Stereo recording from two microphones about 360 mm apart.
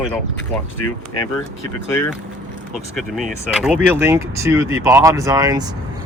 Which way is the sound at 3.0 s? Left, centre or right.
Centre.